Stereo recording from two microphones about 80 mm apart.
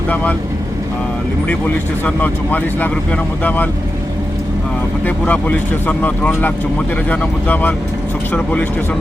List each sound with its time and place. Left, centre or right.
2.0 s speech: left
5.2 s speech: centre